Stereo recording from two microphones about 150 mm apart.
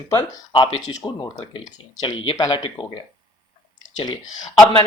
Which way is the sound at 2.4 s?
30° left (ahead or behind).